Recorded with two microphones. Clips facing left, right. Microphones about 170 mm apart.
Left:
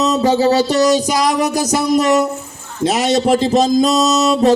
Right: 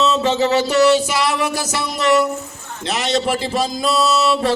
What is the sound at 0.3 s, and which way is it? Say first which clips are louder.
Speech: left 2 dB; 35° left (ahead or behind).